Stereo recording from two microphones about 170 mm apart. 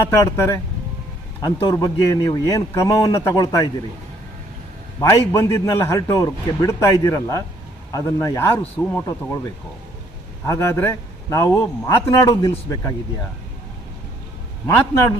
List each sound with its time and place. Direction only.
0.0 s a man's voice: 15° left (ahead or behind)
4.9 s a man's voice: 15° left (ahead or behind)
10.4 s a man's voice: 15° left (ahead or behind)